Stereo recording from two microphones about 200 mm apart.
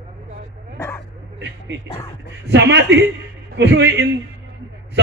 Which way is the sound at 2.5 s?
60° right (ahead or behind).